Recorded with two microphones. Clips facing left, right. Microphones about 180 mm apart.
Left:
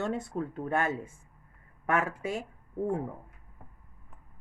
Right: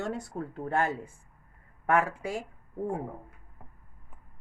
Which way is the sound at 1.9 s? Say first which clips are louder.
Right 2 dB; 20° left (ahead or behind).